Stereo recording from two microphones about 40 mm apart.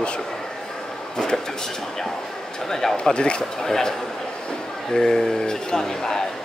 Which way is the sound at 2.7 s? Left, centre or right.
Centre.